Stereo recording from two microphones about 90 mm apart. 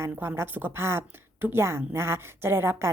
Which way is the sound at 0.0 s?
25° right (ahead or behind).